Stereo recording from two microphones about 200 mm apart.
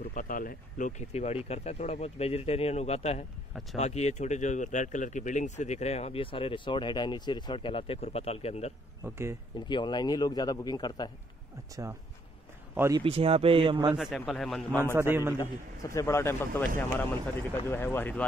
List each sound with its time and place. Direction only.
0.0 s speech: 45° left (ahead or behind)
9.0 s speech: 15° right (ahead or behind)
9.7 s a man's voice: 20° left (ahead or behind)
12.7 s speech: 15° right (ahead or behind)
13.0 s speech: 30° right (ahead or behind)
13.9 s a man's voice: 5° right (ahead or behind)
15.0 s speech: 10° right (ahead or behind)
15.3 s a man's voice: 15° left (ahead or behind)